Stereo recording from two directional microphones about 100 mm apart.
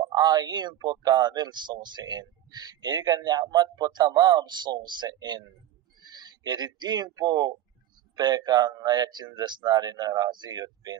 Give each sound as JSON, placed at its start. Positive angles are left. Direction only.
{"t": 0.1, "sound": "speech", "side_deg": -45}
{"t": 6.0, "sound": "a sound", "side_deg": -45}
{"t": 7.2, "sound": "speech", "side_deg": -45}